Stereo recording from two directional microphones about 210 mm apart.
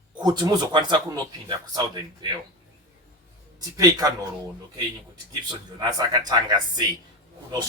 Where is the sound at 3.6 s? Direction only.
15° right (ahead or behind).